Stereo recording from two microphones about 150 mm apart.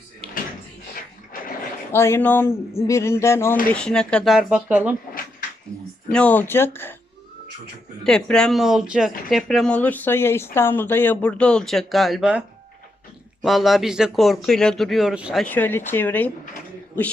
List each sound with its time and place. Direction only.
1.9 s speech: 15° left (ahead or behind)
3.7 s speech: 5° left (ahead or behind); by 4.9 s 10° right (ahead or behind)
6.1 s speech: 10° left (ahead or behind)
8.0 s speech: 5° left (ahead or behind)
13.4 s speech: centre (ahead or behind)
15.4 s speech: 10° left (ahead or behind)